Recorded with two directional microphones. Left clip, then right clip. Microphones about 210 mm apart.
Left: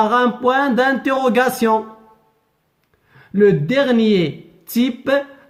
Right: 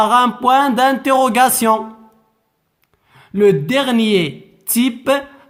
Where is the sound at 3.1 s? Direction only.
35° right (ahead or behind).